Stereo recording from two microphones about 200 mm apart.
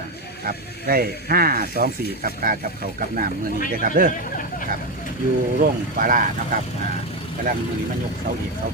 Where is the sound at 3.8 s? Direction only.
45° right (ahead or behind).